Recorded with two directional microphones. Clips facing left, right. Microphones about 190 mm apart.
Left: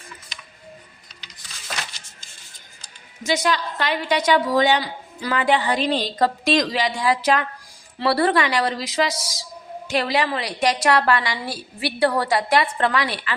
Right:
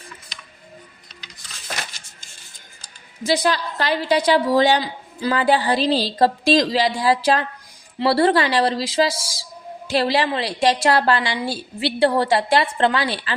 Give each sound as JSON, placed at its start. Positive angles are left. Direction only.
{"t": 3.2, "sound": "a woman's voice", "side_deg": -35}